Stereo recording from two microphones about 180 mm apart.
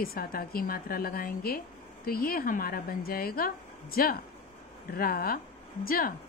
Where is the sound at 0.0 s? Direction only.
55° left (ahead or behind).